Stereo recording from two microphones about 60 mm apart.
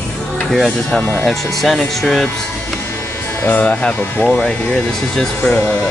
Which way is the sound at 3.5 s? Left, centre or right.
Left.